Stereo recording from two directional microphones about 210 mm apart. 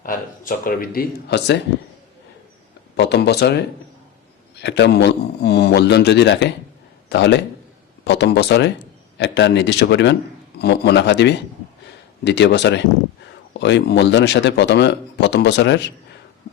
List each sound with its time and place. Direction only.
0.0 s a man's voice: 40° left (ahead or behind)
2.9 s a man's voice: 55° left (ahead or behind)